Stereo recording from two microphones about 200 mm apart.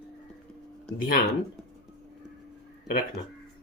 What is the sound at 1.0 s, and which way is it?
Speech, 45° left (ahead or behind).